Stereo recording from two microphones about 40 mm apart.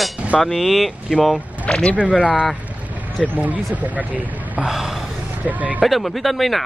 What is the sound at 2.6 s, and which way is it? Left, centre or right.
Vehicle, right.